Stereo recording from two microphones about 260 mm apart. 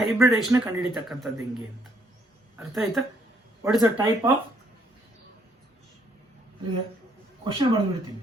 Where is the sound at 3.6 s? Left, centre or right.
Centre.